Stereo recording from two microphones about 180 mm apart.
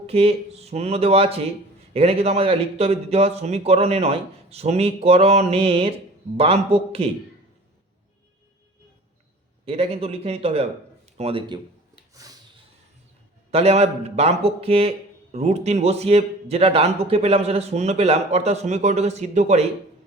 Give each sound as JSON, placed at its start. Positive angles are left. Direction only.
{"t": 0.1, "sound": "a man's voice", "side_deg": -35}
{"t": 9.6, "sound": "a man's voice", "side_deg": -30}
{"t": 12.1, "sound": "a sound", "side_deg": -20}
{"t": 13.5, "sound": "a man's voice", "side_deg": -35}